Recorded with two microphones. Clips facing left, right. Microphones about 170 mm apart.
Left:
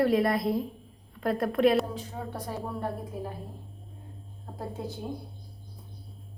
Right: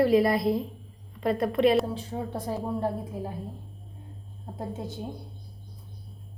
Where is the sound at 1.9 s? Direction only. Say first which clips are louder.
Right 4 dB; 25° right (ahead or behind).